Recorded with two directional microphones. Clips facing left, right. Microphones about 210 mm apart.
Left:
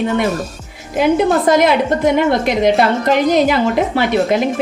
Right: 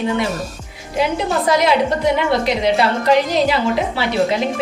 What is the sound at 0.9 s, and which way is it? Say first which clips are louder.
A woman's voice: left 6 dB; 50° left (ahead or behind).